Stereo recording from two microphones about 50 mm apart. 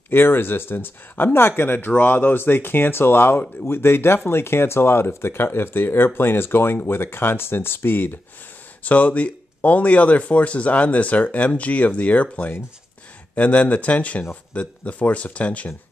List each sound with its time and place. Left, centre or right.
0.1 s speech: left
8.8 s speech: left